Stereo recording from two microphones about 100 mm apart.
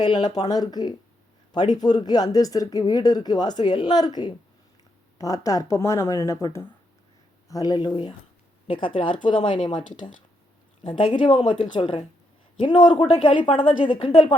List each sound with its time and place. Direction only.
0.0 s a woman's voice: 45° left (ahead or behind); by 6.7 s 25° left (ahead or behind)
7.4 s speech: 40° left (ahead or behind)
8.6 s a woman's voice: 60° left (ahead or behind)